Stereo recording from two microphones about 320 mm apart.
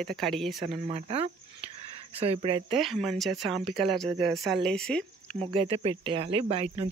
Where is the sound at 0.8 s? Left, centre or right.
Centre.